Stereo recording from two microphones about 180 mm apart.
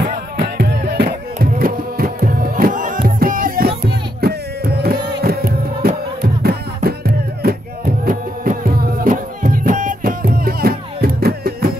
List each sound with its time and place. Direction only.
0.0 s music: 65° right (ahead or behind)